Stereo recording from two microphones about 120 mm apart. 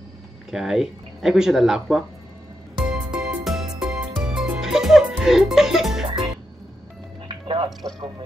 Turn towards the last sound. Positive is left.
turn(degrees=-45)  # may be behind; listen again after turning